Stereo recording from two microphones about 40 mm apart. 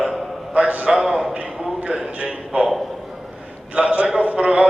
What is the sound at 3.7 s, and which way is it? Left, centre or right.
Speech, right.